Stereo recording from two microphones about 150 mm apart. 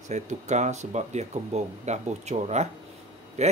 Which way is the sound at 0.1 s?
50° right (ahead or behind).